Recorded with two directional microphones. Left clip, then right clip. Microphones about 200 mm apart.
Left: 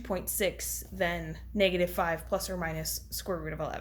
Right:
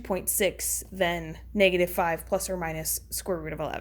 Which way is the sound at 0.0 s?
35° right (ahead or behind).